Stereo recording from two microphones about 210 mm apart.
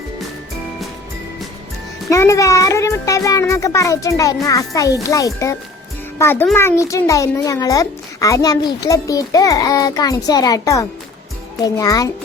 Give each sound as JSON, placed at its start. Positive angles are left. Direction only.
{"t": 2.0, "sound": "a child's voice", "side_deg": 15}